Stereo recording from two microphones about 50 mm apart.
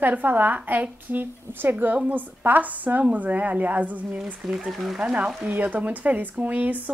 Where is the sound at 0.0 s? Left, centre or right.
Right.